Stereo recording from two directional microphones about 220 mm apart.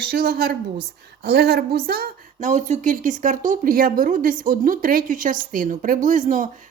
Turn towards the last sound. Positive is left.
turn(degrees=-35)  # may be behind; listen again after turning